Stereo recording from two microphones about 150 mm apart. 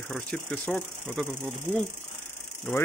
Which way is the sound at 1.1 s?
10° right (ahead or behind).